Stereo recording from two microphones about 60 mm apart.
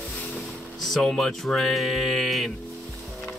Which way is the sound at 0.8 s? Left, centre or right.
Centre.